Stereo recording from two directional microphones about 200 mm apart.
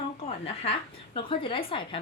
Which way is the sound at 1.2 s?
25° left (ahead or behind).